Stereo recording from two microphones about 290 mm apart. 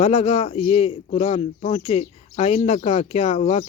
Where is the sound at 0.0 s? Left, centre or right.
Left.